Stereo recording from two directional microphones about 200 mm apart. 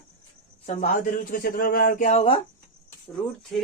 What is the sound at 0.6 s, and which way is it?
Speech, 40° left (ahead or behind).